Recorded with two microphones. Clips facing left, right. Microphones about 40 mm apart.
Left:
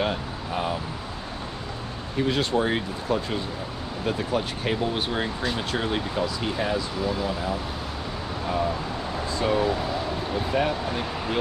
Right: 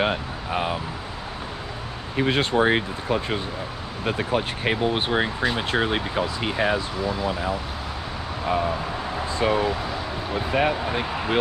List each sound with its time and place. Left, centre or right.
0.0 s speech: right
2.1 s speech: right
9.3 s speech: right